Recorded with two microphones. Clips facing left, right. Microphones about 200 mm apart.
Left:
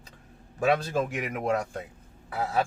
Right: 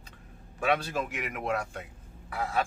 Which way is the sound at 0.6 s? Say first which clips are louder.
Left 4 dB; 40° left (ahead or behind).